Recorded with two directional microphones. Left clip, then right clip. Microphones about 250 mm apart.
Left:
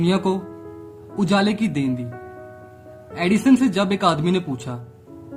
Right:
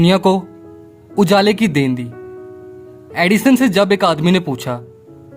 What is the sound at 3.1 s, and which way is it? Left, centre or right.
Speech, right.